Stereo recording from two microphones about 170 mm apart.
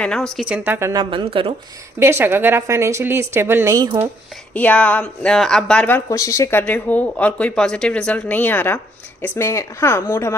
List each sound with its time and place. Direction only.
0.0 s a woman's voice: 5° left (ahead or behind); by 1.0 s 15° right (ahead or behind)
1.1 s speech: 30° right (ahead or behind)
2.0 s a woman's voice: 15° right (ahead or behind)
4.5 s speech: 10° left (ahead or behind)